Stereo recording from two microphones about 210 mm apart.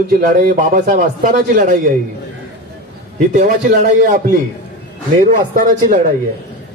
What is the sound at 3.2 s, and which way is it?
A man's voice, 35° right (ahead or behind).